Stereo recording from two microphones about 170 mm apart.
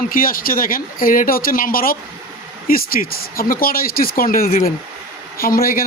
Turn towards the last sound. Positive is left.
turn(degrees=60)  # may be behind; listen again after turning